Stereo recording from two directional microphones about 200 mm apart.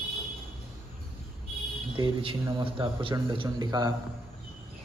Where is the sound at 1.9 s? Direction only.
25° right (ahead or behind).